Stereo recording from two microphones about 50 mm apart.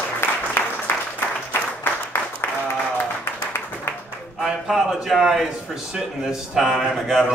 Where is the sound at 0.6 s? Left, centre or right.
Left.